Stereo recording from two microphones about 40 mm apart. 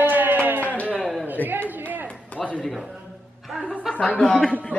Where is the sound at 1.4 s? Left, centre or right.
Right.